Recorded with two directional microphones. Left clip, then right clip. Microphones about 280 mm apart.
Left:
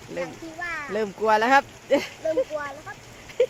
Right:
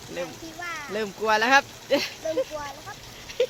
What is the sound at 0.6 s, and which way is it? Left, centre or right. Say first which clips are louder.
Speech: left 3 dB; left.